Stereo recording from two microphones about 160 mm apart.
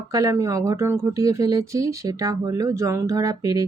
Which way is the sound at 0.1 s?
20° right (ahead or behind).